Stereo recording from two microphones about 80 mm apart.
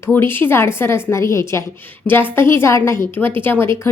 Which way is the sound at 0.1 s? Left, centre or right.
Left.